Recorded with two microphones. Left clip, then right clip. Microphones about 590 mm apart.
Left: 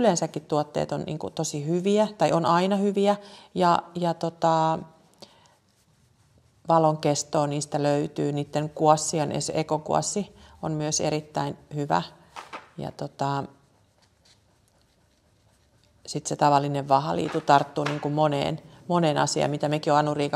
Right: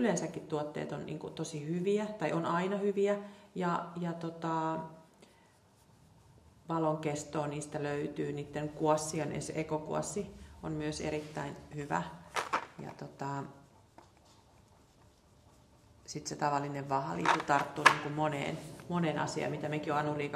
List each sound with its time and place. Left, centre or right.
0.0 s a woman's voice: left
6.7 s a woman's voice: left
16.1 s a woman's voice: left
17.7 s a woman's voice: left